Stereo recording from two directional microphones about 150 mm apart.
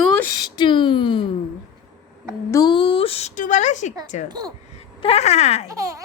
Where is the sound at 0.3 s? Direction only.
30° left (ahead or behind).